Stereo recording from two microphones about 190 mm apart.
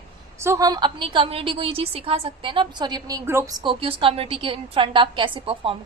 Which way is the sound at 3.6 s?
30° right (ahead or behind).